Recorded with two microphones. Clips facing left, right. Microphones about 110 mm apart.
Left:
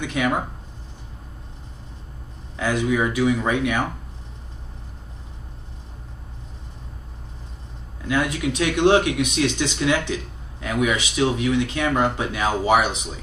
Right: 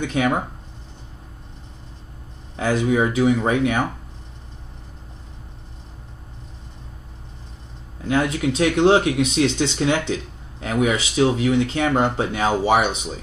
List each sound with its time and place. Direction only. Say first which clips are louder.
0.0 s speech: right 2 dB; 25° right (ahead or behind)
2.5 s speech: right 2 dB; 25° right (ahead or behind)
8.1 s speech: right 2 dB; 30° right (ahead or behind)